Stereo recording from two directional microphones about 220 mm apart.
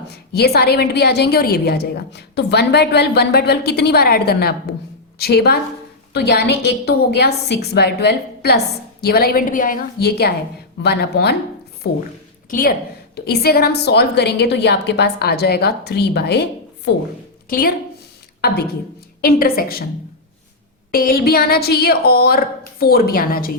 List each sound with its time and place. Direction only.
0.1 s a woman's voice: 45° left (ahead or behind)
19.2 s a woman's voice: 40° left (ahead or behind)
20.9 s a woman's voice: 40° left (ahead or behind)